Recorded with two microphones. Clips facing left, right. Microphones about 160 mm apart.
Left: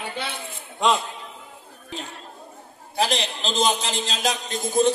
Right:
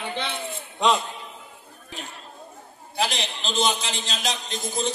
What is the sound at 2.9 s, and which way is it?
A man's voice, 40° left (ahead or behind).